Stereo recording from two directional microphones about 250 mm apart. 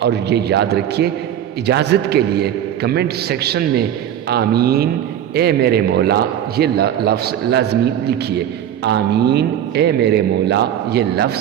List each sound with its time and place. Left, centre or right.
0.0 s a man's voice: right